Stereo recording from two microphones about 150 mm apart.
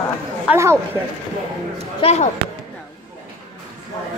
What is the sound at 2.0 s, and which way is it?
Speech, 45° left (ahead or behind).